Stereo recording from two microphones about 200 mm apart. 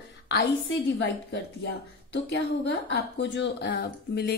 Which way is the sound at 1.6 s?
65° left (ahead or behind).